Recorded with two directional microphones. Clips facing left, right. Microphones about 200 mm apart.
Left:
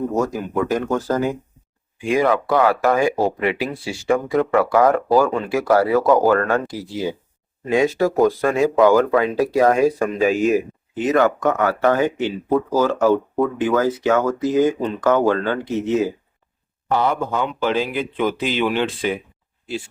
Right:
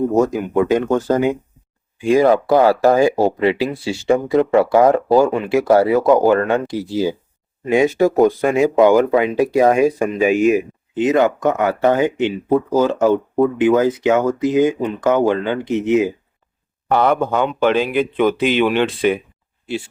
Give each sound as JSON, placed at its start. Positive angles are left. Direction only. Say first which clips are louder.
{"t": 0.1, "sound": "speech", "louder": "right 5 dB", "side_deg": -15}
{"t": 2.0, "sound": "speech", "louder": "right 5 dB", "side_deg": -30}
{"t": 16.9, "sound": "speech", "louder": "right 4 dB", "side_deg": -60}